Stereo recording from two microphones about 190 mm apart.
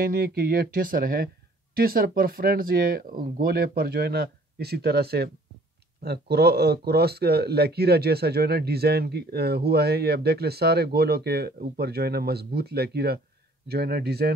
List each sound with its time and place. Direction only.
0.0 s speech: 50° right (ahead or behind)